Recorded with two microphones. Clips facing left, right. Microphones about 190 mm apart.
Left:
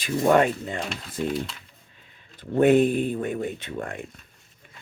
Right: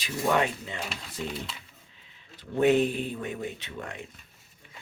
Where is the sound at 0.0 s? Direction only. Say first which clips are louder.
Left 7 dB; 50° left (ahead or behind).